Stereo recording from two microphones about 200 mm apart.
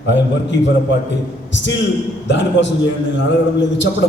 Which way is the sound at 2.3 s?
65° left (ahead or behind).